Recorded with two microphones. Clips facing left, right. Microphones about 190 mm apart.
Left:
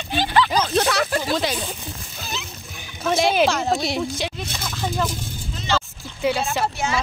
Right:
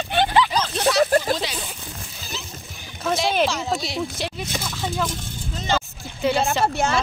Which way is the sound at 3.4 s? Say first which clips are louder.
Left 4 dB; 55° left (ahead or behind).